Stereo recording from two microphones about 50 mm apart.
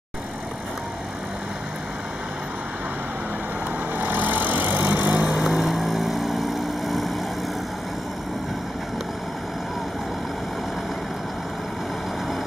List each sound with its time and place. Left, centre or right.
3.9 s vehicle: right
5.4 s vehicle: centre